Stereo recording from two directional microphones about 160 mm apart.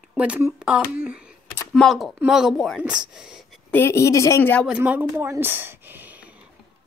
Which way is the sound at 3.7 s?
15° left (ahead or behind).